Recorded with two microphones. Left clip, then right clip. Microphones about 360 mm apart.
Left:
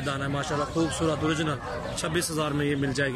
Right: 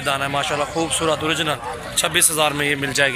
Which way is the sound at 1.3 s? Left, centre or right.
Centre.